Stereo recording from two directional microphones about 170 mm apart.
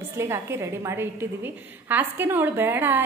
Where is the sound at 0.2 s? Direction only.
15° right (ahead or behind).